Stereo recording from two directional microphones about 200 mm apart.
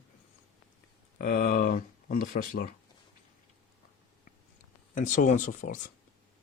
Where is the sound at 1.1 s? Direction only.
45° left (ahead or behind).